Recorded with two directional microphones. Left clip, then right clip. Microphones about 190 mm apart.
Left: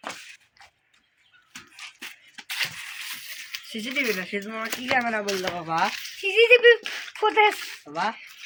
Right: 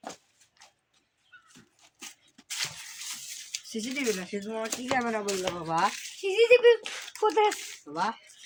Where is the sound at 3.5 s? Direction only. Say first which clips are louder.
Left 4 dB; 10° left (ahead or behind).